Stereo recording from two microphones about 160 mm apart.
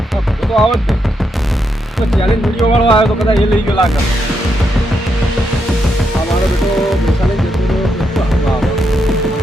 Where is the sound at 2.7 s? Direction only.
35° left (ahead or behind).